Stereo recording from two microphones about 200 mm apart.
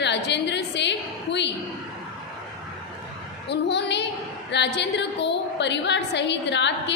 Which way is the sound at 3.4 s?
60° left (ahead or behind).